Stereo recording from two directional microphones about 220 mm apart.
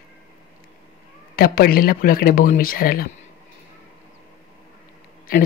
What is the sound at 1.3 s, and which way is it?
Speech, 45° left (ahead or behind).